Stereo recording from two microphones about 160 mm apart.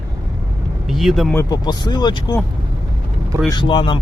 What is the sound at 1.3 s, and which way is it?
Speech, 25° left (ahead or behind).